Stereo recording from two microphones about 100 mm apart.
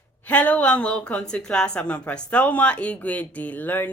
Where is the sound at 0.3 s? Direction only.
15° left (ahead or behind).